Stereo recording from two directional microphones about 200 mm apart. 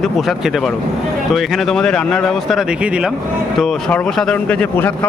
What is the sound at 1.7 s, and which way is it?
Speech, centre (ahead or behind).